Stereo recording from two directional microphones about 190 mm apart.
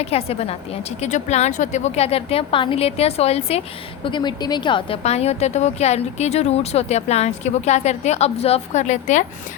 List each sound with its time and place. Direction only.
0.0 s a woman's voice: 30° left (ahead or behind)